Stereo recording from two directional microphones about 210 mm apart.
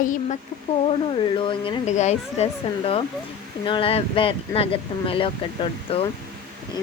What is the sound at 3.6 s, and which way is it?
Speech, 25° left (ahead or behind).